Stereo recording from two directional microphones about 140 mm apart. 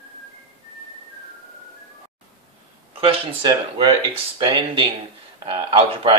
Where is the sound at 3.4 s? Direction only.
40° right (ahead or behind).